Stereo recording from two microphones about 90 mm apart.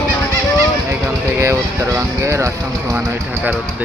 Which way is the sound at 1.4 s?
35° right (ahead or behind).